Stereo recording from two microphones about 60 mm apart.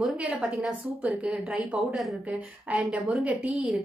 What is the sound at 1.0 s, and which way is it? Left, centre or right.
Speech, right.